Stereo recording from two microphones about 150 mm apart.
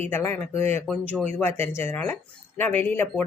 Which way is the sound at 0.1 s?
15° left (ahead or behind).